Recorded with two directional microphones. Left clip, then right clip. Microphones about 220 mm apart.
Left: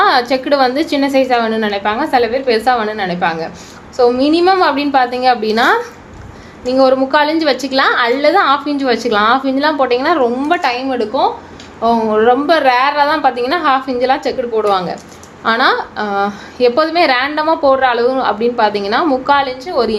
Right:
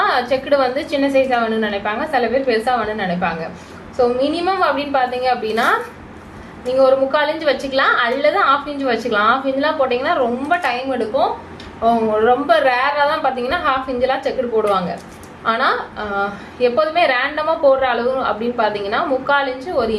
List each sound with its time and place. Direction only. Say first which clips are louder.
0.0 s a woman's voice: left 5 dB; 50° left (ahead or behind)
6.7 s a woman's voice: left 3 dB; 50° left (ahead or behind)